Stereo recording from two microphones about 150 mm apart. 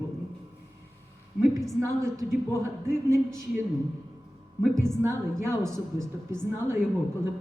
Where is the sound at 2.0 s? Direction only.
20° right (ahead or behind).